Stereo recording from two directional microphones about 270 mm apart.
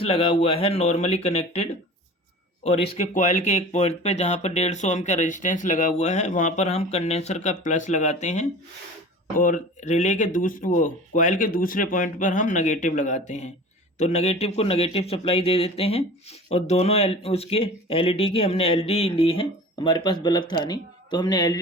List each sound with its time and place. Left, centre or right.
0.0 s speech: left
2.6 s speech: left